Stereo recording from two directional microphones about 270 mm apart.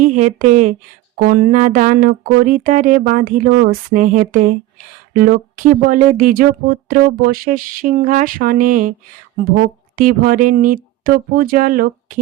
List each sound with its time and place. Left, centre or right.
0.0 s speech: right